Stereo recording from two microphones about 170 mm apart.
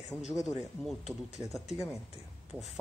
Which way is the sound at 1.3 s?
40° left (ahead or behind).